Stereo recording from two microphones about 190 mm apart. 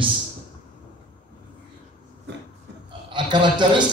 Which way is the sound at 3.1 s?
25° right (ahead or behind).